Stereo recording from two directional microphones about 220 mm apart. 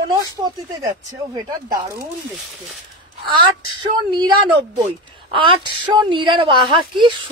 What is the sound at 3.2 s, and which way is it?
A woman's voice, 20° right (ahead or behind).